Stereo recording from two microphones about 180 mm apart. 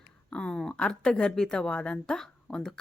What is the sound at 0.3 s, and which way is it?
Speech, 5° left (ahead or behind).